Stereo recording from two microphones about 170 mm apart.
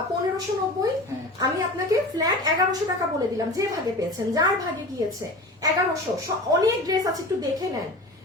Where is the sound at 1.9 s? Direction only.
20° right (ahead or behind).